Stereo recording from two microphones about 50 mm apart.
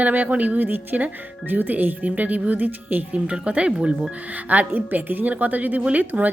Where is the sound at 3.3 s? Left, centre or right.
Right.